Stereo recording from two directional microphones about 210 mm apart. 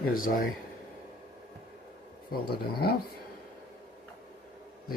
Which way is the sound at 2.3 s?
45° left (ahead or behind).